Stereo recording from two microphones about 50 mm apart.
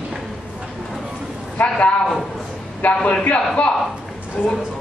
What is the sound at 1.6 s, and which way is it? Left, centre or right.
Speech, left.